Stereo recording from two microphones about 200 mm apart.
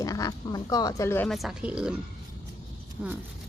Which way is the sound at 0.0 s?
15° left (ahead or behind).